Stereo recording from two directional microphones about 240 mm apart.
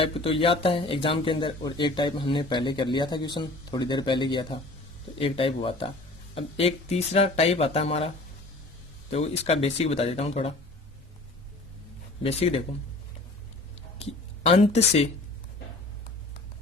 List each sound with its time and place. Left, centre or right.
0.0 s speech: left
9.1 s speech: left
12.2 s speech: left
14.0 s speech: left